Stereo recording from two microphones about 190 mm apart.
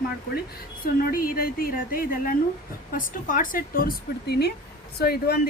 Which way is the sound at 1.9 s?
50° left (ahead or behind).